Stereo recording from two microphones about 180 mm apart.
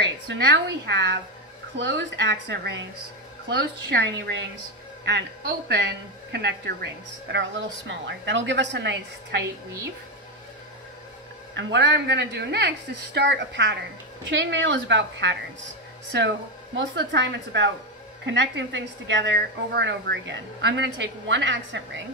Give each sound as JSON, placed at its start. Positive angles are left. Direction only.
{"t": 0.3, "sound": "speech", "side_deg": -75}
{"t": 1.8, "sound": "a woman's voice", "side_deg": -85}
{"t": 7.3, "sound": "a woman's voice", "side_deg": -80}
{"t": 11.5, "sound": "a woman's voice", "side_deg": -85}